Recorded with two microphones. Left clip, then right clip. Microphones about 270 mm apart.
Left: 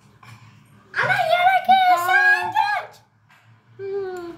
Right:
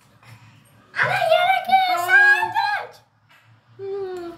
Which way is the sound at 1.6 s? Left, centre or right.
Left.